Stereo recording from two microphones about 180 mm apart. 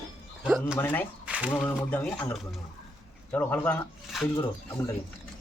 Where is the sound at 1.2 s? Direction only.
5° right (ahead or behind).